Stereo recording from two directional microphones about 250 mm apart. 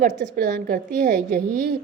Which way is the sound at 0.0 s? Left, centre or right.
Right.